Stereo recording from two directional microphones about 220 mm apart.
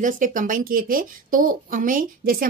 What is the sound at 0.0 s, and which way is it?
Speech, 35° right (ahead or behind).